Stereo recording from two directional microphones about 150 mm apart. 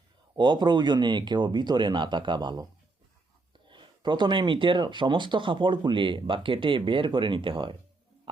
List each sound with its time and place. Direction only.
0.3 s speech: 30° right (ahead or behind)
3.7 s speech: 30° right (ahead or behind)